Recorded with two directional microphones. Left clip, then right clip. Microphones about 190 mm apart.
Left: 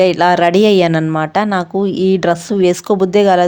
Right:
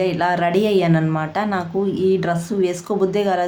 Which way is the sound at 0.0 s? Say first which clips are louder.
Left 8 dB; 50° left (ahead or behind).